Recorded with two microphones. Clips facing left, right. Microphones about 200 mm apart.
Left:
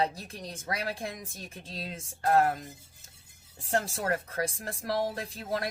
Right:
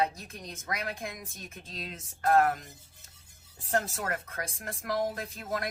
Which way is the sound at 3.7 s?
30° left (ahead or behind).